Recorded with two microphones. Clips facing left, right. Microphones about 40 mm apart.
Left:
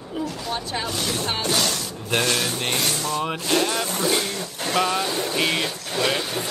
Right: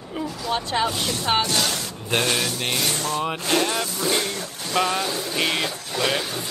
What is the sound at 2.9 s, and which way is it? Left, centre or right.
Speech, right.